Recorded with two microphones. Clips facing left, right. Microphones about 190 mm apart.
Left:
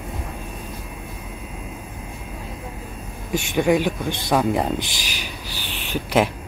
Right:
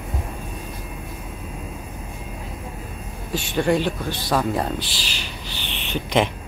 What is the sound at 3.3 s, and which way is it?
Speech, 10° left (ahead or behind).